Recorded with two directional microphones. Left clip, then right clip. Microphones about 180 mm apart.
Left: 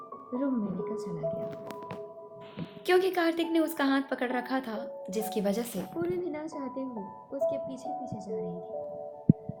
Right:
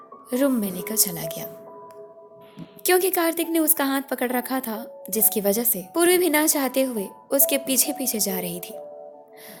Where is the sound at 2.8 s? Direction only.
55° right (ahead or behind).